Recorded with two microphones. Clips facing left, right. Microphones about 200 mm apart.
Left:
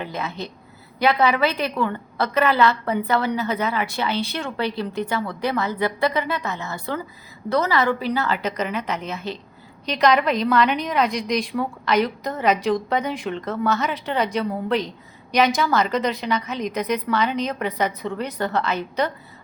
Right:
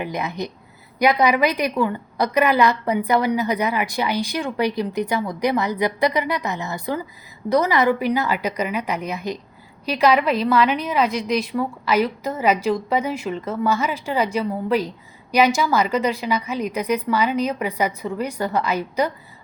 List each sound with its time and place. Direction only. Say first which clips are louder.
0.0 s a woman's voice: right 3 dB; 15° right (ahead or behind)